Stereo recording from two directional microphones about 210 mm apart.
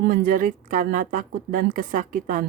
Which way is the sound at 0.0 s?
45° right (ahead or behind).